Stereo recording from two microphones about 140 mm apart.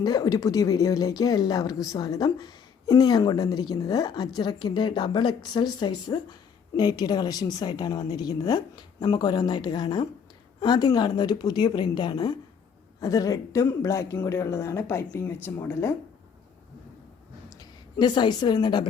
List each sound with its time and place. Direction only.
0.0 s a woman's voice: 25° left (ahead or behind)
17.5 s a woman's voice: 30° left (ahead or behind)